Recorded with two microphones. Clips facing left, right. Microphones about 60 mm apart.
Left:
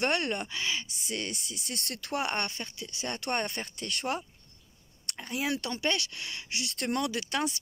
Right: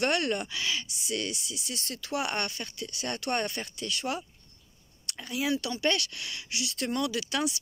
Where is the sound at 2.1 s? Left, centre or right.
Left.